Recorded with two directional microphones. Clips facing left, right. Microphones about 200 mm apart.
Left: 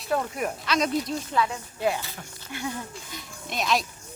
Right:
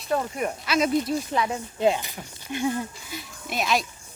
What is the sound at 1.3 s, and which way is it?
Speech, 20° right (ahead or behind).